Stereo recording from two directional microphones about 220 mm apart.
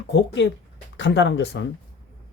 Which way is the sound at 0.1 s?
55° left (ahead or behind).